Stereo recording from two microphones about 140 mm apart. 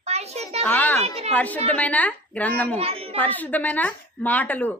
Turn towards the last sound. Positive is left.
turn(degrees=10)  # may be behind; listen again after turning